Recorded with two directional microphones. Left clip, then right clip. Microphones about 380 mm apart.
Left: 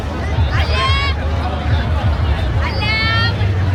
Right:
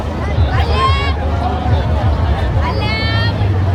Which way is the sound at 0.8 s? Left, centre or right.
Right.